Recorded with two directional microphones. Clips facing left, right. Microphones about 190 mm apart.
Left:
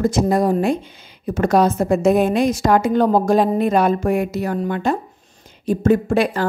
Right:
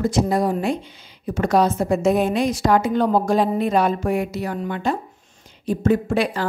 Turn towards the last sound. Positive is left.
turn(degrees=45)  # may be behind; listen again after turning